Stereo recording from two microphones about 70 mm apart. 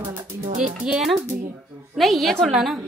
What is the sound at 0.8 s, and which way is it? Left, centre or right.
Speech, centre.